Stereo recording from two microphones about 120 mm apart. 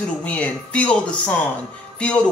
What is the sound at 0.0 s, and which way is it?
A woman's voice, 10° left (ahead or behind).